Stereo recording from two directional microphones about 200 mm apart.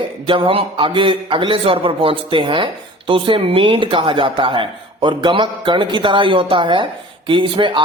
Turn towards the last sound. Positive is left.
turn(degrees=-25)  # may be behind; listen again after turning